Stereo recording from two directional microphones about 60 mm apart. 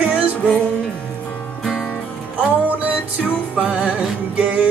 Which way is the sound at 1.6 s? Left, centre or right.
Centre.